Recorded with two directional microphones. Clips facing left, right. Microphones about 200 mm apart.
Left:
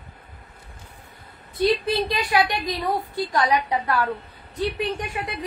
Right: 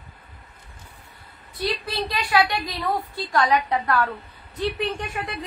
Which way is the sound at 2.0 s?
20° left (ahead or behind).